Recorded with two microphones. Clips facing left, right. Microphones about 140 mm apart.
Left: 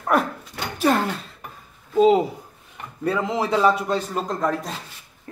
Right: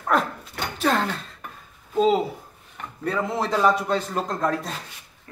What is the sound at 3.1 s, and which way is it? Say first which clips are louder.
A man's voice: left 2 dB; 10° left (ahead or behind).